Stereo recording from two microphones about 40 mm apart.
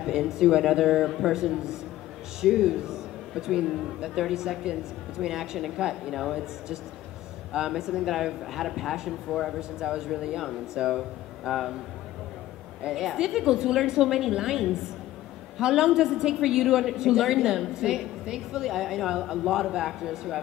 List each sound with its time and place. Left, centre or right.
0.0 s speech: centre
1.3 s a woman's voice: centre
7.5 s a woman's voice: centre
9.3 s speech: centre
9.6 s a woman's voice: centre
12.8 s a woman's voice: centre